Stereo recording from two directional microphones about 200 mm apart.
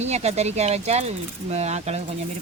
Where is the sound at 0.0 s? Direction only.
35° right (ahead or behind).